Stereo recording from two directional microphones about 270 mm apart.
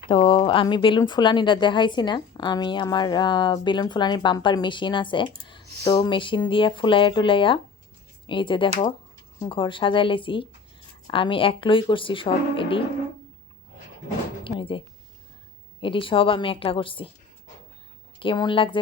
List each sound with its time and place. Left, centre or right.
0.1 s speech: centre
14.4 s a sound: centre
15.8 s speech: centre
18.2 s speech: centre